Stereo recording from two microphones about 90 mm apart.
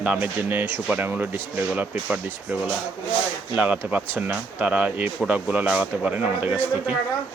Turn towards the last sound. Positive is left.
turn(degrees=-15)  # may be behind; listen again after turning